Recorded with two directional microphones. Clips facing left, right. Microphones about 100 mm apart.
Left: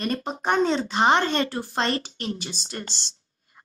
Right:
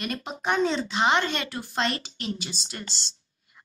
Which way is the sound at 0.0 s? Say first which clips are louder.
Left 4 dB; 40° left (ahead or behind).